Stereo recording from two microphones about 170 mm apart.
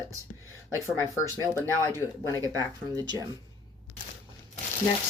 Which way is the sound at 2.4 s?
20° right (ahead or behind).